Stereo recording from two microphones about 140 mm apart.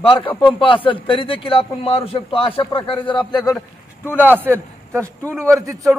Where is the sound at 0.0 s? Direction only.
40° left (ahead or behind).